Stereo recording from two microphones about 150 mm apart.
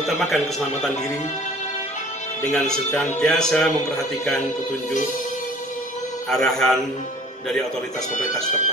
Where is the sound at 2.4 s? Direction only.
5° left (ahead or behind).